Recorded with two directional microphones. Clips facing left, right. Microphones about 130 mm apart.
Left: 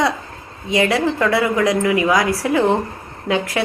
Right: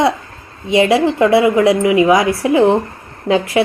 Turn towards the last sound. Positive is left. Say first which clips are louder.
# right 6 dB
turn(degrees=-25)  # may be behind; listen again after turning